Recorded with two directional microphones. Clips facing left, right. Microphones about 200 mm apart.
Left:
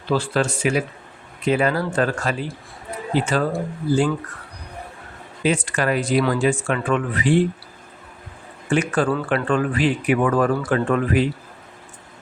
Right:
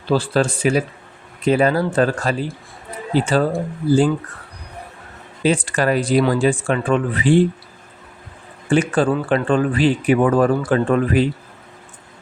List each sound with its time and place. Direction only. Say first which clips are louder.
0.1 s speech: right 3 dB; 35° right (ahead or behind)
5.4 s speech: right 3 dB; 35° right (ahead or behind)
8.7 s speech: right 3 dB; 30° right (ahead or behind)